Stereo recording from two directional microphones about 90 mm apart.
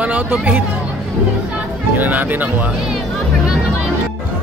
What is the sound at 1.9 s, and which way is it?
Speech, 20° right (ahead or behind).